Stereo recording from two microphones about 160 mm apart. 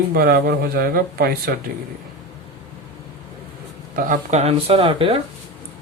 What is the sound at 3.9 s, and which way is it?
Speech, 60° right (ahead or behind).